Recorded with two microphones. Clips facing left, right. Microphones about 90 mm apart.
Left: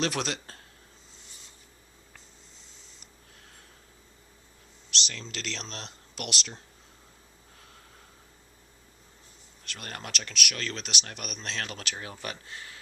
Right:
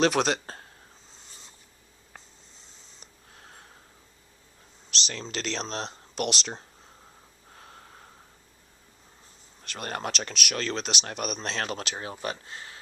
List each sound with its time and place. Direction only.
0.0 s speech: 20° right (ahead or behind)
4.9 s a sound: 30° right (ahead or behind)
5.2 s speech: 30° right (ahead or behind)
7.5 s snort: 35° right (ahead or behind)
9.7 s speech: 30° right (ahead or behind)